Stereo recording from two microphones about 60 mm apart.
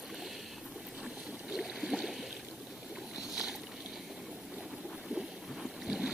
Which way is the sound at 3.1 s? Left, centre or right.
Centre.